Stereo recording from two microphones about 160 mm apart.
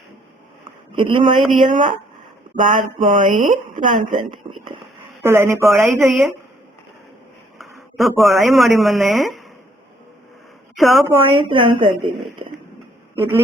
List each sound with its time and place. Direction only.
0.9 s a woman's voice: 30° right (ahead or behind)
1.5 s speech: 55° right (ahead or behind)
4.3 s a sound: 30° right (ahead or behind)
5.2 s speech: 15° right (ahead or behind)
5.8 s speech: centre (ahead or behind)
7.6 s speech: centre (ahead or behind)
10.8 s a woman's voice: centre (ahead or behind)
11.1 s a woman's voice: 35° right (ahead or behind)